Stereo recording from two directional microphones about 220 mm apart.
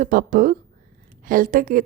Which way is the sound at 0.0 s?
40° right (ahead or behind).